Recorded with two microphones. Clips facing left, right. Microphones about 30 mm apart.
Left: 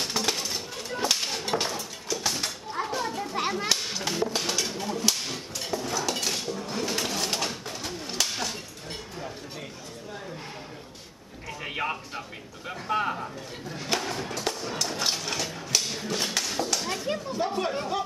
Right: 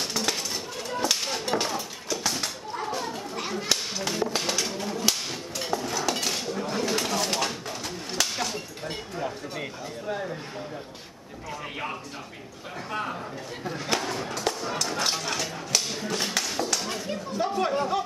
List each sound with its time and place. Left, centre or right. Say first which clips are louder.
0.2 s chop: even; centre
2.9 s children playing: left 1 dB; centre
3.3 s whip: left 4 dB; left
3.6 s whip: even; centre
6.6 s bird: right 5 dB; centre
11.6 s a sound: left 5 dB; centre
13.7 s a sound: right 1 dB; centre
17.4 s chatter: right 4 dB; centre